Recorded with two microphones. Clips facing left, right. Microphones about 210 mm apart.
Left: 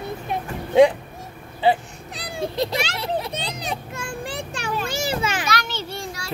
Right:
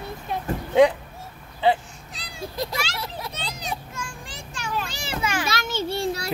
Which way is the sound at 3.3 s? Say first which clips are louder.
Left 4 dB; 60° left (ahead or behind).